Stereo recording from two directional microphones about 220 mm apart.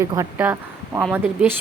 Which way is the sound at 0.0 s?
15° right (ahead or behind).